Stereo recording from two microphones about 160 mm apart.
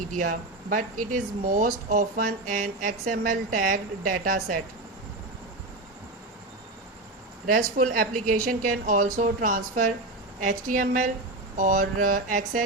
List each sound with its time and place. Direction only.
0.2 s speech: 60° right (ahead or behind)
7.4 s speech: 60° right (ahead or behind)